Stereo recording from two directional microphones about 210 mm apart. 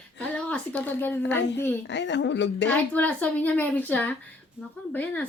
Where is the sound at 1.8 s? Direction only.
55° left (ahead or behind).